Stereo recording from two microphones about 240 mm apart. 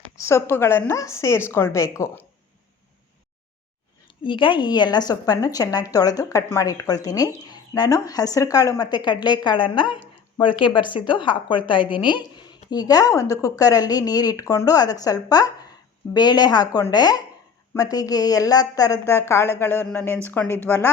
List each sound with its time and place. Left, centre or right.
0.2 s a woman's voice: centre
4.2 s a woman's voice: left